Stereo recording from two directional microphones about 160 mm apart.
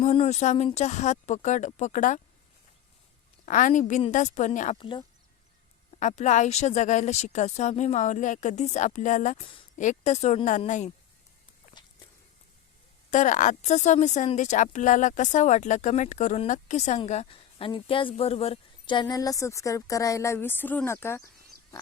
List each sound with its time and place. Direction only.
0.0 s speech: 40° left (ahead or behind)
3.4 s speech: 50° left (ahead or behind)
4.8 s speech: 30° left (ahead or behind)
6.0 s speech: 50° left (ahead or behind)
9.4 s speech: 35° left (ahead or behind)
9.7 s speech: 50° left (ahead or behind)
11.8 s walk: 30° left (ahead or behind)
13.1 s speech: 50° left (ahead or behind); by 21.2 s 15° left (ahead or behind)